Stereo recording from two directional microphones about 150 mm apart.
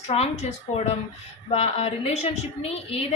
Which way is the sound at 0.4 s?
50° left (ahead or behind).